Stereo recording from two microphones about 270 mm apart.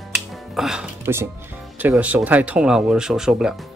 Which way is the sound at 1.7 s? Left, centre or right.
Centre.